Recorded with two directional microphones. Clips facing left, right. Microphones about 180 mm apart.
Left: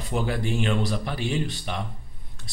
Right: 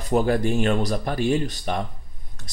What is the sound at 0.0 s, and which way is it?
Speech, 45° right (ahead or behind).